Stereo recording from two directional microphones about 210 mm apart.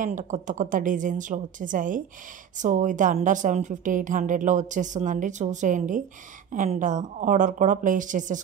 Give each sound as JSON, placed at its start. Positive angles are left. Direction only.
{"t": 0.0, "sound": "a woman's voice", "side_deg": -35}